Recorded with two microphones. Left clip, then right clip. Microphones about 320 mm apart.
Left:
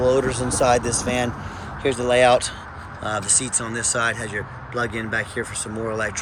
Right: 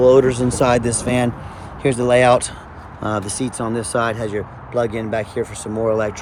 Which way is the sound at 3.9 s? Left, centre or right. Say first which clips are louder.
Right 2 dB; centre.